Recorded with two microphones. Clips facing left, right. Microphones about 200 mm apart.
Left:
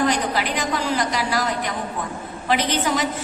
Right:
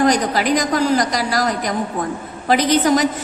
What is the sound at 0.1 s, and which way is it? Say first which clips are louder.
A woman's voice: right 6 dB; 40° right (ahead or behind).